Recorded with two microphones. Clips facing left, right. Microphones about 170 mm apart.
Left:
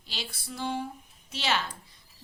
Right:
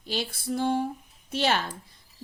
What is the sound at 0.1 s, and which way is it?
Speech, 50° right (ahead or behind).